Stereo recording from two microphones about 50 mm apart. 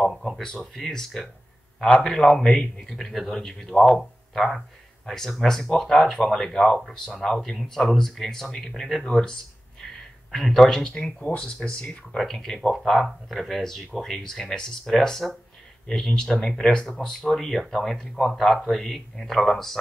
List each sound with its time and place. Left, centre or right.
0.0 s a sound: centre
0.4 s speech: centre
2.8 s speech: centre
9.0 s a sound: centre
10.3 s speech: centre
10.9 s speech: left
12.2 s speech: centre
15.9 s speech: centre